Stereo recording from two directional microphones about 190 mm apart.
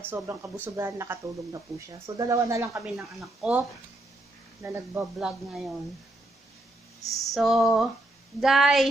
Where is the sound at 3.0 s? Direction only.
Centre (ahead or behind).